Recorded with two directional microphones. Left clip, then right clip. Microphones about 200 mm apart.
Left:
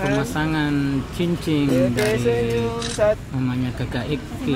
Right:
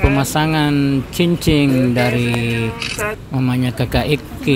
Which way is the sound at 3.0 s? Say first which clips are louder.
Left 5 dB; 55° left (ahead or behind).